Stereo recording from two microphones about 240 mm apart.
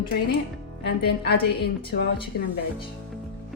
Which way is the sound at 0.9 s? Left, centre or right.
Left.